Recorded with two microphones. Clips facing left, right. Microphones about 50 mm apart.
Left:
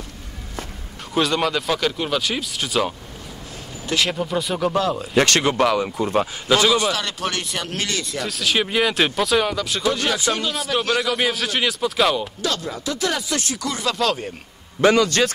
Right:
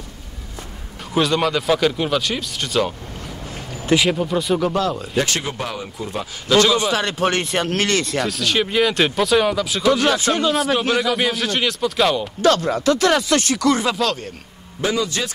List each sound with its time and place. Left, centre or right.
1.1 s speech: centre
3.9 s speech: centre
5.1 s speech: left
6.4 s a man's voice: centre
6.8 s speech: right
8.3 s speech: centre
10.0 s speech: right
10.4 s a man's voice: centre
12.4 s speech: right
14.0 s speech: centre
14.8 s speech: left